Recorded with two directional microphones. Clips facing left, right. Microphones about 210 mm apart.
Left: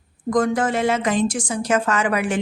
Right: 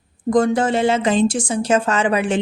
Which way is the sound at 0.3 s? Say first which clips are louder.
Right 3 dB; 30° right (ahead or behind).